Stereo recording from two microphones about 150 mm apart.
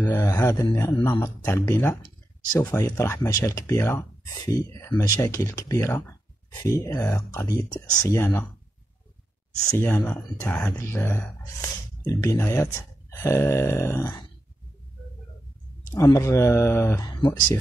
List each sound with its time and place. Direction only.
0.0 s speech: 20° left (ahead or behind)
9.7 s speech: 15° left (ahead or behind)
15.9 s speech: 20° left (ahead or behind)